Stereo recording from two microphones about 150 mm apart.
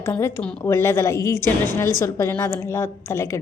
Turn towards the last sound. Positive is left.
turn(degrees=20)  # may be behind; listen again after turning